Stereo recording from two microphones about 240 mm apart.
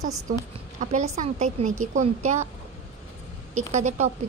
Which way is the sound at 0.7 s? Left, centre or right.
Right.